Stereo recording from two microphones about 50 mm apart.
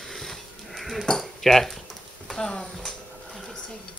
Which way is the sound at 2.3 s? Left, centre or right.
Centre.